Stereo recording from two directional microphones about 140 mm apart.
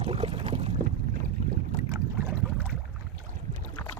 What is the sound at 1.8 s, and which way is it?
Boat, 20° right (ahead or behind).